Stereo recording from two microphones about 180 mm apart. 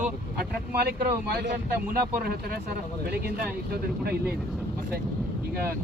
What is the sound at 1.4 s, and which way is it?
A man's voice, 60° right (ahead or behind).